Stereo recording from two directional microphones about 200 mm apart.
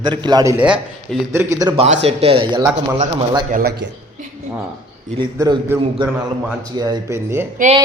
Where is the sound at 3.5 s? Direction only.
45° right (ahead or behind).